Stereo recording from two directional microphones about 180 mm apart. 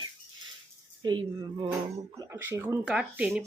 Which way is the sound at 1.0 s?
25° right (ahead or behind).